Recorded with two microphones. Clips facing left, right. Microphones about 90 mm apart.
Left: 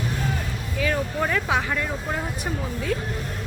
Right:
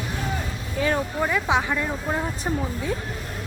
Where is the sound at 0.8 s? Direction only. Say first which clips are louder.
Right 2 dB; 30° right (ahead or behind).